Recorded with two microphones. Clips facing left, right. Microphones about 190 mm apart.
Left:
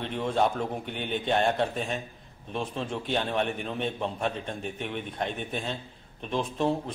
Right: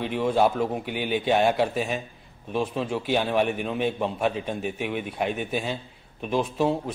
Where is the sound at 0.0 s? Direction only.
5° right (ahead or behind).